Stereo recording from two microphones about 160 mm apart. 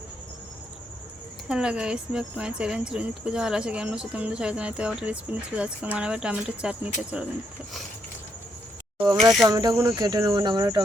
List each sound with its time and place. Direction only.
1.5 s speech: 5° right (ahead or behind)
9.5 s cricket: 25° right (ahead or behind)